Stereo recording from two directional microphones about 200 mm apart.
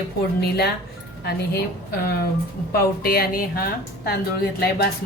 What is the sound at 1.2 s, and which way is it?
Speech, 55° left (ahead or behind).